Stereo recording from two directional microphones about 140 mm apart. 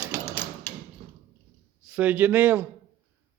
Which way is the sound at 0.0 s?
10° right (ahead or behind).